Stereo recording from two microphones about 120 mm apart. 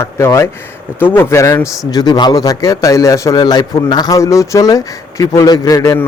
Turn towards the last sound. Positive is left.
turn(degrees=30)  # may be behind; listen again after turning